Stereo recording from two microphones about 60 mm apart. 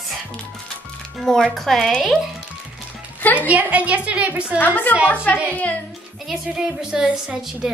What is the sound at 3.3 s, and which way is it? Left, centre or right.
A woman's voice, right.